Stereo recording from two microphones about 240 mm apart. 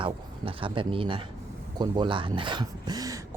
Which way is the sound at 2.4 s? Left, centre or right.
Centre.